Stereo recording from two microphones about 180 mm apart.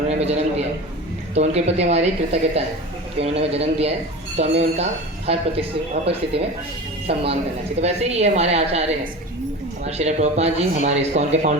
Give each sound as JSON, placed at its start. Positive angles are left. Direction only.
{"t": 0.1, "sound": "speech", "side_deg": -35}
{"t": 9.8, "sound": "speech", "side_deg": -35}